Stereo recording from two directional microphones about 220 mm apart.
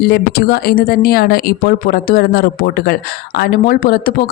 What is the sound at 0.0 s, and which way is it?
Speech, 45° left (ahead or behind).